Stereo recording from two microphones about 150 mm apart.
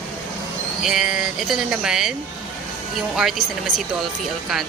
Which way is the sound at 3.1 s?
Centre (ahead or behind).